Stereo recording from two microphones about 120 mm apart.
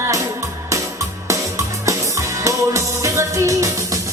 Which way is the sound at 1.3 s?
25° right (ahead or behind).